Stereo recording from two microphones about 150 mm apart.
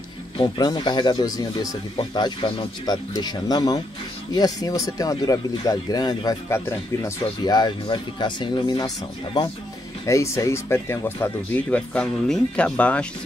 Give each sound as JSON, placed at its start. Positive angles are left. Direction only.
{"t": 0.4, "sound": "speech", "side_deg": 30}
{"t": 7.2, "sound": "speech", "side_deg": 30}